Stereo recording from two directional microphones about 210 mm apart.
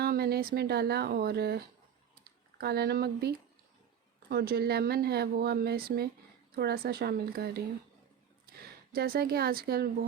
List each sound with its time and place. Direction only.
0.0 s speech: 45° right (ahead or behind)
8.9 s speech: 45° right (ahead or behind)